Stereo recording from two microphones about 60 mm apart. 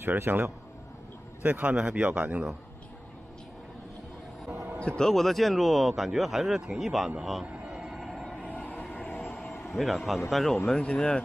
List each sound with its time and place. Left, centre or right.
0.0 s a man's voice: right
1.4 s a man's voice: right
4.7 s speech: centre
7.8 s train: centre
8.4 s a sound: left
9.8 s speech: centre
10.7 s speech: centre